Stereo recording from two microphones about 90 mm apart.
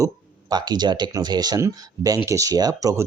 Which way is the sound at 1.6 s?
35° right (ahead or behind).